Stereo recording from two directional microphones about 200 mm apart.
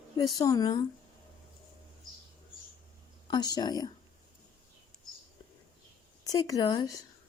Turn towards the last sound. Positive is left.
turn(degrees=20)  # may be behind; listen again after turning